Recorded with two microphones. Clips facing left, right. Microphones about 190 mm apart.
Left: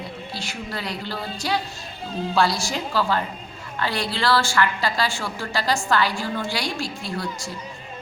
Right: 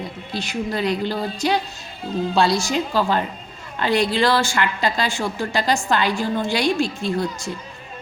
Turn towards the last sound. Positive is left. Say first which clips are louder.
# right 6 dB
turn(degrees=-20)  # may be behind; listen again after turning